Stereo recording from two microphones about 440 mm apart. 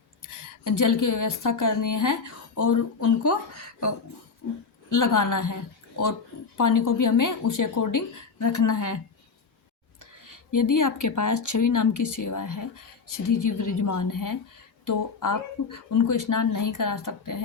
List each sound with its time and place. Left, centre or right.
0.2 s speech: left
4.9 s speech: left
6.6 s speech: left
10.0 s speech: left